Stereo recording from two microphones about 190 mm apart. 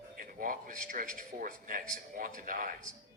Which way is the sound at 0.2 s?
45° right (ahead or behind).